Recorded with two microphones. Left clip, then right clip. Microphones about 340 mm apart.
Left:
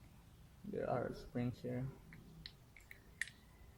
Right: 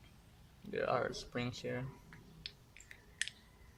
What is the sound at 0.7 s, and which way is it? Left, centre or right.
Speech, right.